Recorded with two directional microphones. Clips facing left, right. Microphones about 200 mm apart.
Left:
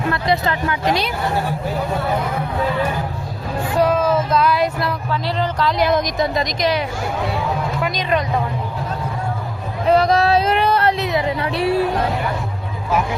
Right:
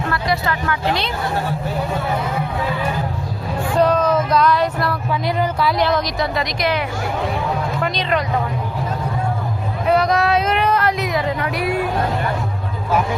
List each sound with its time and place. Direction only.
0.1 s speech: 20° left (ahead or behind)
3.8 s music: 5° left (ahead or behind)
5.2 s a sound: 10° right (ahead or behind)
5.8 s speech: 20° left (ahead or behind)
7.8 s speech: 15° left (ahead or behind)
9.8 s a sound: 35° left (ahead or behind)
11.3 s speech: 25° left (ahead or behind)